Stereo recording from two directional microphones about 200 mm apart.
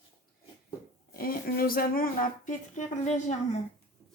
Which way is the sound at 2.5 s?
40° left (ahead or behind).